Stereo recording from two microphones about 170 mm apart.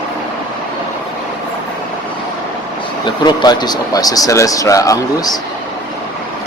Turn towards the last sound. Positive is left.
turn(degrees=20)  # may be behind; listen again after turning